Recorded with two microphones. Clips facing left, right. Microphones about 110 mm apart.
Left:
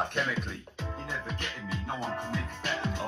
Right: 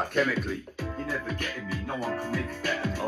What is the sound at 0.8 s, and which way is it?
Music, 25° left (ahead or behind).